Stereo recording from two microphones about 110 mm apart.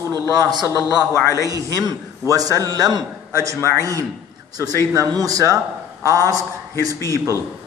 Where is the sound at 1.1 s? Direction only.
25° left (ahead or behind).